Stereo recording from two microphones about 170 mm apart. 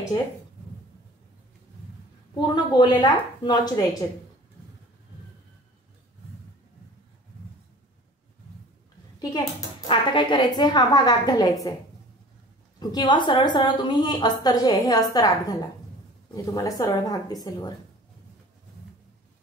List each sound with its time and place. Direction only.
2.3 s a woman's voice: 25° left (ahead or behind)
9.2 s a woman's voice: 25° left (ahead or behind)
12.7 s a woman's voice: 25° left (ahead or behind)